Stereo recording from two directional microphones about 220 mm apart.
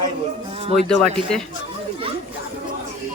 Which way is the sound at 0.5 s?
25° right (ahead or behind).